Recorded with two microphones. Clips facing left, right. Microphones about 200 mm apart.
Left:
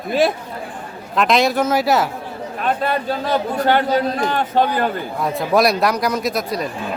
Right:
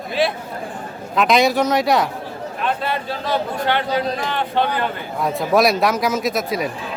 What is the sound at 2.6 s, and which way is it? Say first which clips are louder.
A man's voice: left 3 dB; 45° left (ahead or behind).